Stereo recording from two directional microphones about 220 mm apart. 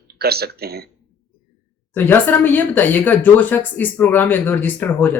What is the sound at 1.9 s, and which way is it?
Speech, 10° left (ahead or behind).